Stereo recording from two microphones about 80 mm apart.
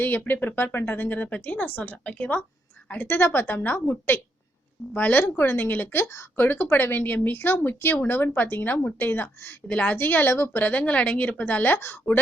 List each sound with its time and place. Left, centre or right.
0.0 s speech: left
6.1 s speech: left
6.4 s speech: left